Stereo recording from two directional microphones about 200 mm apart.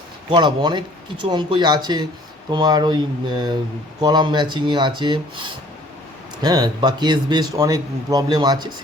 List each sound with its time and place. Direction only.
0.3 s a man's voice: 20° right (ahead or behind)